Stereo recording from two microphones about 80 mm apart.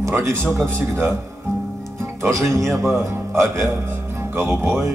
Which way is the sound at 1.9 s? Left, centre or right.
Right.